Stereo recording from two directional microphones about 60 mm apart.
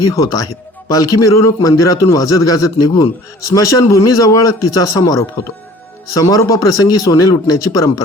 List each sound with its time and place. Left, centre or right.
0.1 s a man's voice: left